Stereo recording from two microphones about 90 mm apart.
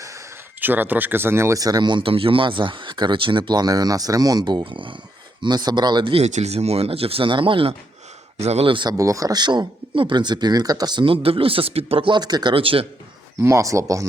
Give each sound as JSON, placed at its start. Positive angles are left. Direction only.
{"t": 0.6, "sound": "speech", "side_deg": -20}
{"t": 1.6, "sound": "speech", "side_deg": -50}
{"t": 5.4, "sound": "speech", "side_deg": -50}
{"t": 6.7, "sound": "speech", "side_deg": -90}
{"t": 8.6, "sound": "speech", "side_deg": -70}
{"t": 8.9, "sound": "speech", "side_deg": -35}
{"t": 11.0, "sound": "speech", "side_deg": -90}
{"t": 12.5, "sound": "speech", "side_deg": -90}
{"t": 13.4, "sound": "speech", "side_deg": -35}